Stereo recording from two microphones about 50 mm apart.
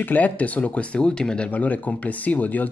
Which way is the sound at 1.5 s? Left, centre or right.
Left.